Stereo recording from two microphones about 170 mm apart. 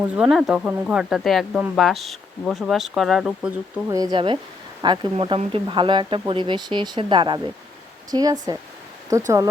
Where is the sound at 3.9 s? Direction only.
20° right (ahead or behind).